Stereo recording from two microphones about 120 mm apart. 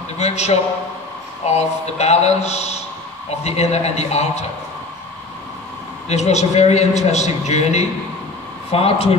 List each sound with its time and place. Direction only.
0.2 s speech: 65° left (ahead or behind)
6.0 s a man's voice: 65° left (ahead or behind)
8.7 s speech: 55° left (ahead or behind)